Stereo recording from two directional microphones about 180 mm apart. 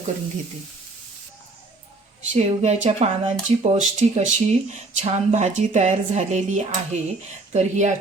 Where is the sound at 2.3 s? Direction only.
40° right (ahead or behind).